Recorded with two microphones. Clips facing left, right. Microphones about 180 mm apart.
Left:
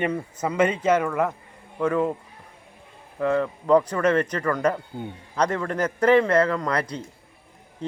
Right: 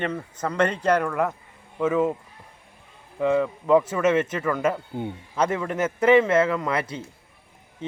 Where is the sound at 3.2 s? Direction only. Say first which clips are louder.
Right 1 dB; 5° right (ahead or behind).